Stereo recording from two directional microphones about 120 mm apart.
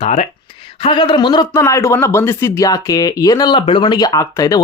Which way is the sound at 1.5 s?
25° left (ahead or behind).